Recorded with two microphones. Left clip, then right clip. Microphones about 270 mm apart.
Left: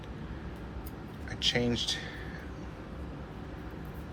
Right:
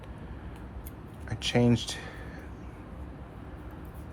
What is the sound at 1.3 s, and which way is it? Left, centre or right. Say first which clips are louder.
Speech: right 2 dB; right.